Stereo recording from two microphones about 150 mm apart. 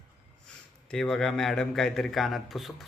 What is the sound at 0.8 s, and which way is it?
A man's voice, 5° left (ahead or behind).